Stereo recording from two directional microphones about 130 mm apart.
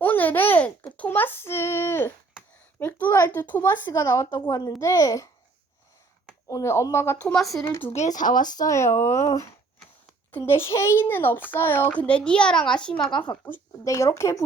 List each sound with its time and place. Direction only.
0.0 s a sound: 15° left (ahead or behind)
2.7 s a woman's voice: 15° left (ahead or behind)
6.5 s speech: 20° left (ahead or behind)
7.5 s speech: 25° left (ahead or behind)
7.9 s speech: 75° left (ahead or behind)
8.4 s a child's voice: 30° left (ahead or behind); by 13.2 s 5° left (ahead or behind)
13.4 s speech: 20° left (ahead or behind)